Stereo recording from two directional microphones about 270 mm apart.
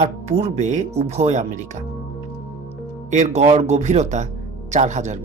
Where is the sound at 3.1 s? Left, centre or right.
Right.